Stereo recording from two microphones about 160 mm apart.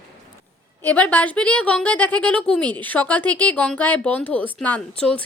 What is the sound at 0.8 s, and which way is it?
A woman's voice, 10° left (ahead or behind).